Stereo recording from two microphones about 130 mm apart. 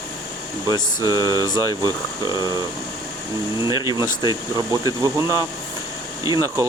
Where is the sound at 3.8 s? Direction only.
30° right (ahead or behind).